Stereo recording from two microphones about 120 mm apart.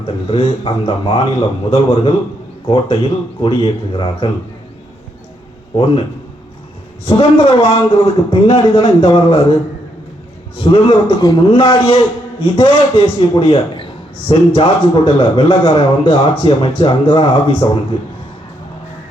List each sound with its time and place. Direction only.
0.3 s a man's voice: 50° left (ahead or behind)
5.7 s a man's voice: 50° left (ahead or behind)
7.0 s a man's voice: 50° left (ahead or behind)
10.6 s a man's voice: 50° left (ahead or behind)